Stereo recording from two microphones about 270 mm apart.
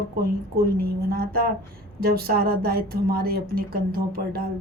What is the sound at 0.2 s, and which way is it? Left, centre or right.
A woman's voice, right.